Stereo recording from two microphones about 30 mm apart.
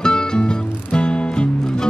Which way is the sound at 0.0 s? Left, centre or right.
Left.